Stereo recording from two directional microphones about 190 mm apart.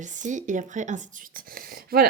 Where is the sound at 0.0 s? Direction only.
40° right (ahead or behind).